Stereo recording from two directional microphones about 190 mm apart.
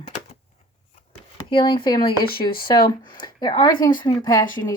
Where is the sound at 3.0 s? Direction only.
25° left (ahead or behind).